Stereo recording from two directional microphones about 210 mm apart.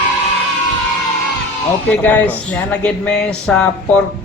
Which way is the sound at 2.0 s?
10° left (ahead or behind).